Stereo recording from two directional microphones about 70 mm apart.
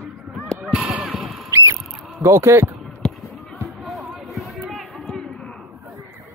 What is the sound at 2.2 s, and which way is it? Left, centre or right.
Speech, right.